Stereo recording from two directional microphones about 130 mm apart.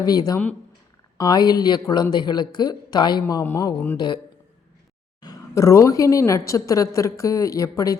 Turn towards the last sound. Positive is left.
turn(degrees=25)  # may be behind; listen again after turning